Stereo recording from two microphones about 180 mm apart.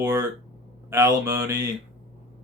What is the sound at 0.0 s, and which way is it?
Speech, 10° right (ahead or behind).